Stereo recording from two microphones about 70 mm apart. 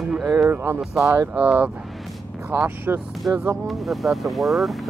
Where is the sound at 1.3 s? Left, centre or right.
Centre.